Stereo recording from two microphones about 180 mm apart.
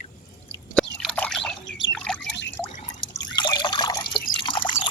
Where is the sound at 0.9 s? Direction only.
5° left (ahead or behind).